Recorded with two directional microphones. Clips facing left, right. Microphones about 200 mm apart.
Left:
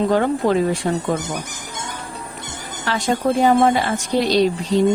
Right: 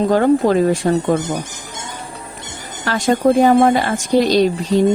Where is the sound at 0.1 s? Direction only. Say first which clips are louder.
Right 4 dB; 45° right (ahead or behind).